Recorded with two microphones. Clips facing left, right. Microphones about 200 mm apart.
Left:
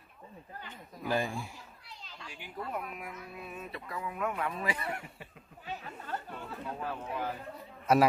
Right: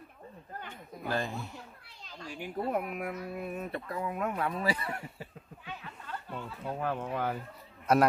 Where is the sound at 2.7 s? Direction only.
60° right (ahead or behind); by 4.7 s 35° right (ahead or behind).